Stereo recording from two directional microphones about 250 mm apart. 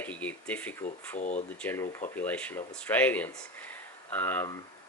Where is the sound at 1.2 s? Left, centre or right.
Left.